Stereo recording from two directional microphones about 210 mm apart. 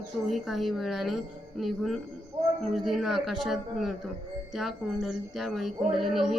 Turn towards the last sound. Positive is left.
turn(degrees=0)  # may be behind; listen again after turning